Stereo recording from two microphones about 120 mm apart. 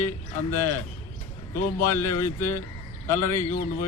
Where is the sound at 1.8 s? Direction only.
20° left (ahead or behind).